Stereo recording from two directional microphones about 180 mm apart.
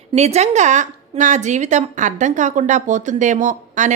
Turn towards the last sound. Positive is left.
turn(degrees=-45)  # may be behind; listen again after turning